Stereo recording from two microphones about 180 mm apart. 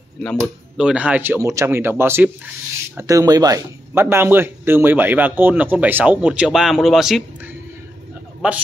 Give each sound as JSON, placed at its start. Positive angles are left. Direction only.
{"t": 0.2, "sound": "speech", "side_deg": 0}